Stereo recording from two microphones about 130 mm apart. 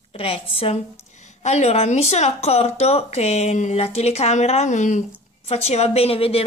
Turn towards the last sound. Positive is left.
turn(degrees=50)  # may be behind; listen again after turning